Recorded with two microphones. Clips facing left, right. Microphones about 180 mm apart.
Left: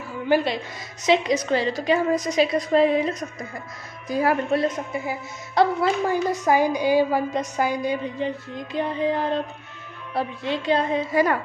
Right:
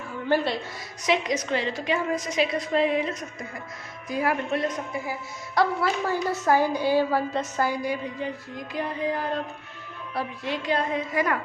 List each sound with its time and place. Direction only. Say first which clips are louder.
0.3 s a woman's voice: left 3 dB; 15° left (ahead or behind)
1.0 s a woman's voice: left 5 dB; 30° left (ahead or behind)
5.5 s a woman's voice: left 4 dB; 20° left (ahead or behind)